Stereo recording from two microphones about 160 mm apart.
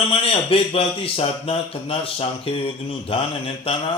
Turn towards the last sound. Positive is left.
turn(degrees=35)  # may be behind; listen again after turning